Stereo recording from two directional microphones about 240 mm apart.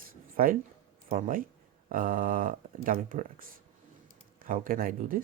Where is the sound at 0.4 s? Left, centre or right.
Right.